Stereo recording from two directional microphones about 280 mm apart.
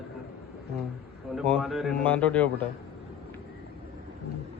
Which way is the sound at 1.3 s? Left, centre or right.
Centre.